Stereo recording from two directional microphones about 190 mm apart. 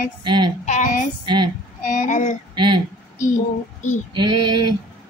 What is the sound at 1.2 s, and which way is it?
Speech, 25° right (ahead or behind).